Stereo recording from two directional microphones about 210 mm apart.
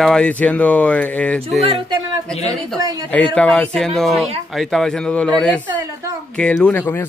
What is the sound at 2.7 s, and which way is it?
Speech, 15° right (ahead or behind).